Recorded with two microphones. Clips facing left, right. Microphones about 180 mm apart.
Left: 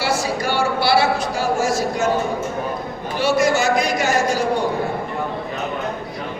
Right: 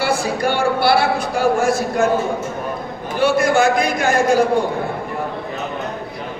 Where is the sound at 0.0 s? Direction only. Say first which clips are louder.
Right 2 dB; 55° right (ahead or behind).